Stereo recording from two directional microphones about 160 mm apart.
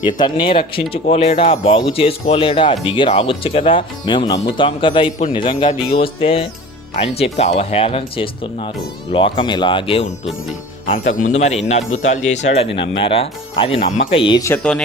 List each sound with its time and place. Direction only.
0.2 s speech: 30° left (ahead or behind)
11.1 s speech: 50° left (ahead or behind)
12.7 s speech: 35° left (ahead or behind)
14.4 s speech: 10° left (ahead or behind)